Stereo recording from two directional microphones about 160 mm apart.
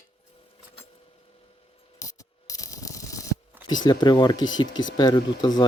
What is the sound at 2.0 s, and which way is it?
Mechanisms, 20° left (ahead or behind).